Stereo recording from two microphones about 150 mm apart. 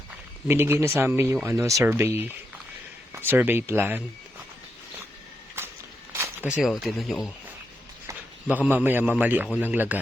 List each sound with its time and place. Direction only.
0.4 s speech: 15° right (ahead or behind)
6.1 s a sound: 20° right (ahead or behind)
6.5 s speech: centre (ahead or behind)
8.4 s speech: 10° right (ahead or behind)